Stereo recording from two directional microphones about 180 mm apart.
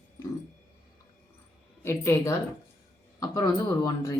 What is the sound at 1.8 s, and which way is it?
Speech, 15° left (ahead or behind).